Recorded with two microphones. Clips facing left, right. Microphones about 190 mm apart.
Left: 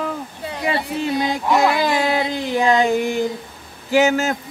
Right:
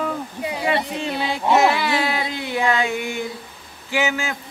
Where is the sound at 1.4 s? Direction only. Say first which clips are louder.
Right 2 dB; 20° right (ahead or behind).